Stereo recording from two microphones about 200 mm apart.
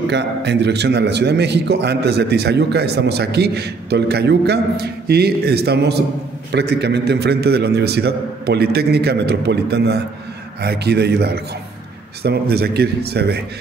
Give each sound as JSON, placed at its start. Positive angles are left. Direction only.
{"t": 0.1, "sound": "a man's voice", "side_deg": -60}